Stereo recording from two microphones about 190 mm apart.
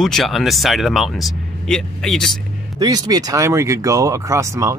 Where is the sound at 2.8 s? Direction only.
20° right (ahead or behind).